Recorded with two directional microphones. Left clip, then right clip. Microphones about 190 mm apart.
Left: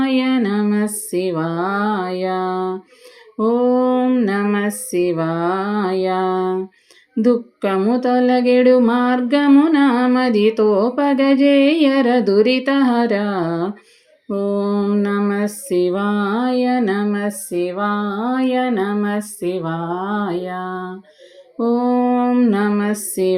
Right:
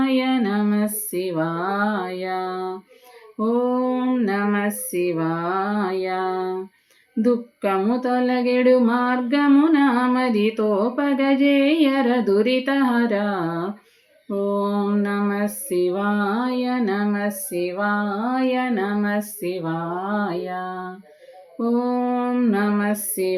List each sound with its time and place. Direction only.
0.0 s a sound: 30° left (ahead or behind)
7.2 s lullaby: 30° left (ahead or behind)
21.6 s female singing: 30° left (ahead or behind)